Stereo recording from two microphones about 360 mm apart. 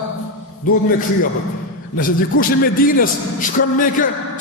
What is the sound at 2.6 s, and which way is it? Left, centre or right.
A man's voice, left.